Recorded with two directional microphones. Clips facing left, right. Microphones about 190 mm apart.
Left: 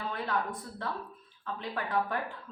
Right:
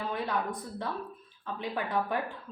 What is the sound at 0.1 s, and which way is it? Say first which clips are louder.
A woman's voice: even; 15° right (ahead or behind).